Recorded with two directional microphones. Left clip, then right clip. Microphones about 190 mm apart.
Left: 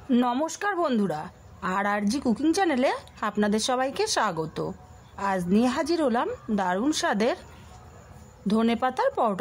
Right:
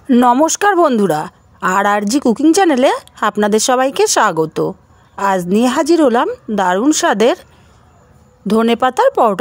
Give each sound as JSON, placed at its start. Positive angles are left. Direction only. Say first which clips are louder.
{"t": 0.1, "sound": "a woman's voice", "louder": "right 14 dB", "side_deg": -40}
{"t": 8.5, "sound": "speech", "louder": "right 12 dB", "side_deg": -40}